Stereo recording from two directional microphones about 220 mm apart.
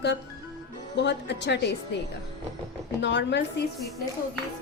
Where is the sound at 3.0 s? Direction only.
55° left (ahead or behind).